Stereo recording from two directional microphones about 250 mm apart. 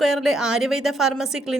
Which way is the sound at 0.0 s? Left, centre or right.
Centre.